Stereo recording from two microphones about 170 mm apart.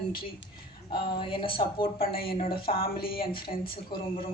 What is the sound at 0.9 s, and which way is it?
A woman's voice, 25° left (ahead or behind).